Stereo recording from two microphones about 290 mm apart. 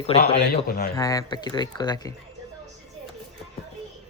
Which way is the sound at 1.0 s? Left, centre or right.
Centre.